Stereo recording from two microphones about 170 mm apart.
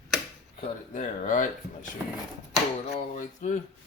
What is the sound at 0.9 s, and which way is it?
Speech, 50° left (ahead or behind).